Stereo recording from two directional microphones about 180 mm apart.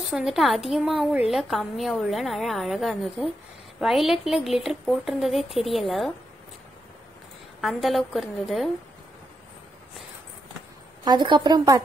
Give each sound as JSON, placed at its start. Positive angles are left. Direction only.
{"t": 0.0, "sound": "a woman's voice", "side_deg": 0}
{"t": 7.6, "sound": "a woman's voice", "side_deg": 0}
{"t": 11.1, "sound": "a woman's voice", "side_deg": -25}